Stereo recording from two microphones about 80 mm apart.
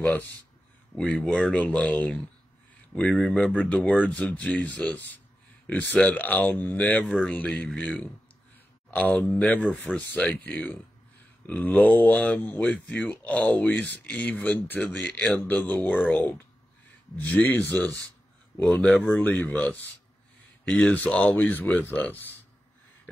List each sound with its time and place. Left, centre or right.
0.9 s speech: centre